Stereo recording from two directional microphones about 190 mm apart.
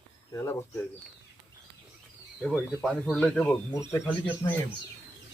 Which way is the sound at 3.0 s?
5° left (ahead or behind).